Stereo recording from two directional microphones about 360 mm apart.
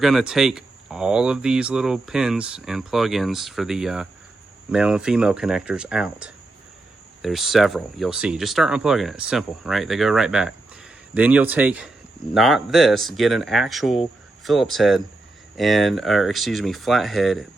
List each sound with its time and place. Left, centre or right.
0.0 s speech: centre